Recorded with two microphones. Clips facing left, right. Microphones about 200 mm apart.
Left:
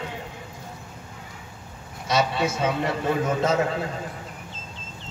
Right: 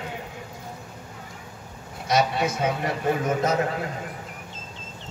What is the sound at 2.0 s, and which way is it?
Speech, 25° left (ahead or behind).